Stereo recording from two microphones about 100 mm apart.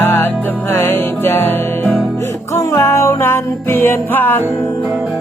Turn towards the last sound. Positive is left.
turn(degrees=-15)  # may be behind; listen again after turning